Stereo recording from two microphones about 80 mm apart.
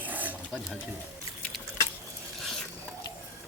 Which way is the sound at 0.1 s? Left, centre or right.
Right.